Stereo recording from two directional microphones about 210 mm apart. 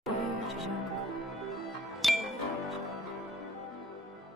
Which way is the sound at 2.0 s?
Centre (ahead or behind).